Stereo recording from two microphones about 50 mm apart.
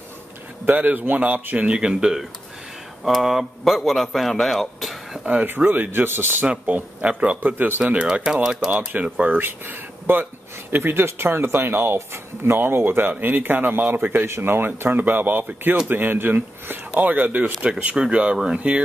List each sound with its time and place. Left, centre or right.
0.7 s speech: right
1.7 s speech: centre
5.2 s speech: right
5.9 s speech: right
6.4 s a man's voice: right
7.9 s a man's voice: right
8.7 s speech: right
9.3 s speech: right
14.2 s a man's voice: right